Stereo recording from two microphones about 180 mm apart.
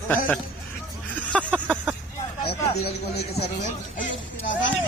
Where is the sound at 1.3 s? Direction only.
5° left (ahead or behind).